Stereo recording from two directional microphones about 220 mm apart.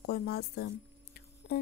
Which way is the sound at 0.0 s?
45° left (ahead or behind).